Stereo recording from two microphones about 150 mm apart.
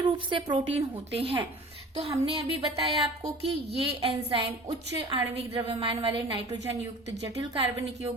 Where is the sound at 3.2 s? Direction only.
40° right (ahead or behind).